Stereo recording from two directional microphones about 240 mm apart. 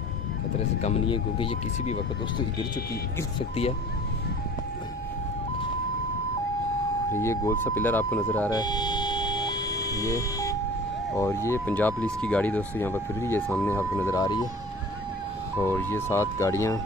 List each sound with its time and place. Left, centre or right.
0.7 s speech: left
7.1 s speech: centre
15.6 s speech: centre